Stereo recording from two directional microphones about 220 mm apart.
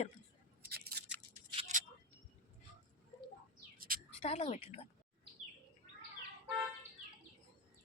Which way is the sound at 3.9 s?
40° right (ahead or behind).